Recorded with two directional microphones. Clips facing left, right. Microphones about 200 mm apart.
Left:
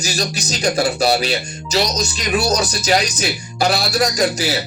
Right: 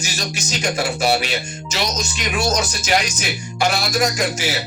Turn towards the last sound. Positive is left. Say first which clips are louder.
# left 3 dB
turn(degrees=35)  # may be behind; listen again after turning